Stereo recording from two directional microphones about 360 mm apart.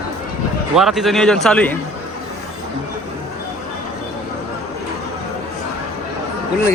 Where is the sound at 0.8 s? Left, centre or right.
Centre.